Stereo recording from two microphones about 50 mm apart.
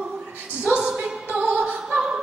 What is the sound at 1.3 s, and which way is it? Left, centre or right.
Music, centre.